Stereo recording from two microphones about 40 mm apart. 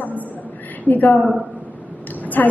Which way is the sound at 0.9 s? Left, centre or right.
Left.